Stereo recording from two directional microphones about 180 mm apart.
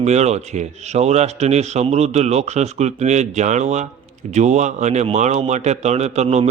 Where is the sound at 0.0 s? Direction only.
40° right (ahead or behind).